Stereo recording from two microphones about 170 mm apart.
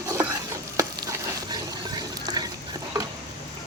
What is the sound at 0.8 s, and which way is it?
Stir, 20° right (ahead or behind).